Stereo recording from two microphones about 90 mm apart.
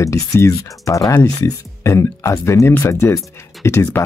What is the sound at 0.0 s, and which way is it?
Speech, 35° left (ahead or behind).